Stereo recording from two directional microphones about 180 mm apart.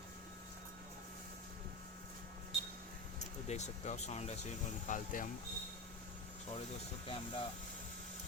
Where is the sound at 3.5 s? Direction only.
40° left (ahead or behind).